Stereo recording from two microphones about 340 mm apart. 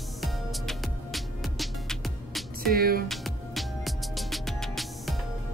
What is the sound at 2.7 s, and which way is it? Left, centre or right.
Music, right.